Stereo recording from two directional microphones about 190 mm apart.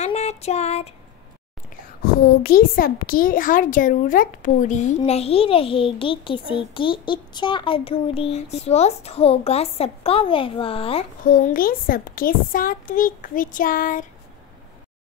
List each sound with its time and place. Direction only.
0.0 s a sound: 35° left (ahead or behind)
2.2 s a woman's voice: 50° left (ahead or behind); by 11.1 s 30° left (ahead or behind)
11.2 s a child's voice: 50° left (ahead or behind)